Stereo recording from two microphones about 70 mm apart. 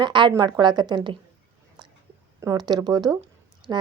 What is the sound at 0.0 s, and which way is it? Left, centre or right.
Speech, right.